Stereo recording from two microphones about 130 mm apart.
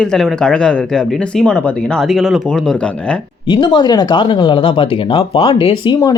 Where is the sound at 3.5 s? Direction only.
40° left (ahead or behind).